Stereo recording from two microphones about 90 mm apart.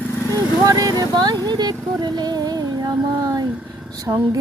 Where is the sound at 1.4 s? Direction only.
50° right (ahead or behind).